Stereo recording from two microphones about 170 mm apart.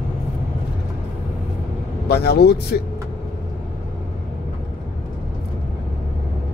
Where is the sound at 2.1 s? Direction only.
70° left (ahead or behind).